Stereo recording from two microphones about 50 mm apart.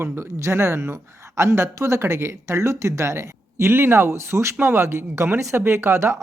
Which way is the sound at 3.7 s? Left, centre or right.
Right.